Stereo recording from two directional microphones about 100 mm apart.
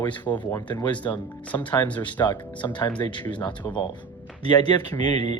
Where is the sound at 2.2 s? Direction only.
50° left (ahead or behind).